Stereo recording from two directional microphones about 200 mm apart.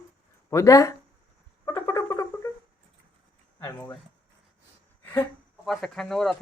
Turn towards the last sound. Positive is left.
turn(degrees=0)  # may be behind; listen again after turning